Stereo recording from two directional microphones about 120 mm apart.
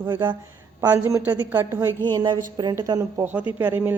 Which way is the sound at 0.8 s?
15° right (ahead or behind).